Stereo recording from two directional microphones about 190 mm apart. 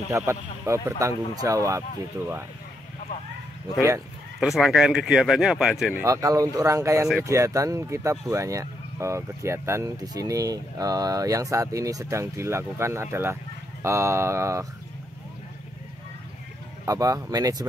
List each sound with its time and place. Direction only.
0.2 s speech: 15° right (ahead or behind)
4.4 s speech: centre (ahead or behind)
6.0 s speech: 15° right (ahead or behind)
16.8 s speech: 20° right (ahead or behind)